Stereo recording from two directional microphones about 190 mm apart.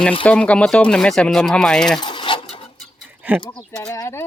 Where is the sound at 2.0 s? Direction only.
25° left (ahead or behind).